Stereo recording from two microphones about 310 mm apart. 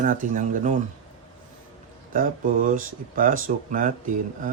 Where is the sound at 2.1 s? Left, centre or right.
Right.